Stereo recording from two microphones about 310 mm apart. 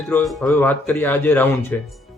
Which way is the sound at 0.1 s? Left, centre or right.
Centre.